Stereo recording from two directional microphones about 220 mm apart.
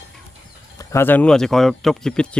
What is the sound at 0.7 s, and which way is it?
Speech, 10° left (ahead or behind).